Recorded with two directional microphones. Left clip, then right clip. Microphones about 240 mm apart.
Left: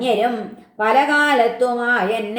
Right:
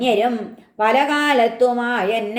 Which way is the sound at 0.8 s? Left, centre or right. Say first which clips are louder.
Left 1 dB; right.